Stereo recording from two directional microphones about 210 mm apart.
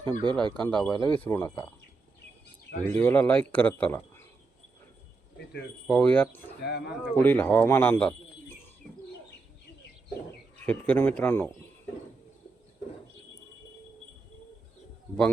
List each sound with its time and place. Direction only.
0.0 s speech: 10° left (ahead or behind)
0.9 s speech: 20° left (ahead or behind)
2.9 s speech: 10° left (ahead or behind)
5.9 s speech: 5° left (ahead or behind)
6.6 s speech: 50° left (ahead or behind)
7.0 s speech: 10° left (ahead or behind)
10.7 s speech: 10° left (ahead or behind)